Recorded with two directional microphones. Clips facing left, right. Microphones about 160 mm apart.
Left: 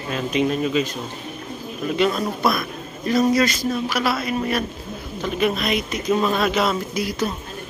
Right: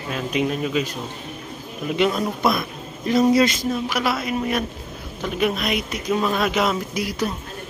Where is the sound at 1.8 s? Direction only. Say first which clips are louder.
Even; 15° right (ahead or behind).